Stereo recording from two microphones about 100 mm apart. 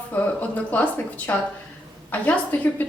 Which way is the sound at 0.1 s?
15° left (ahead or behind).